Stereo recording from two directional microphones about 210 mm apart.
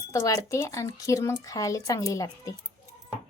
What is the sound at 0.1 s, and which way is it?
Speech, 15° left (ahead or behind).